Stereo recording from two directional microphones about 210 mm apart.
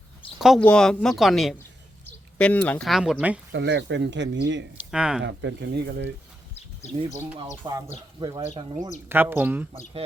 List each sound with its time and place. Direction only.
0.3 s speech: centre (ahead or behind)
3.5 s speech: 55° right (ahead or behind)
4.8 s speech: 5° right (ahead or behind)
5.2 s speech: 60° right (ahead or behind)
7.6 s speech: 20° right (ahead or behind)